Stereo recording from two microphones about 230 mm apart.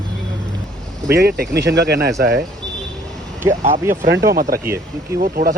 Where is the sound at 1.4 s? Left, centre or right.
Right.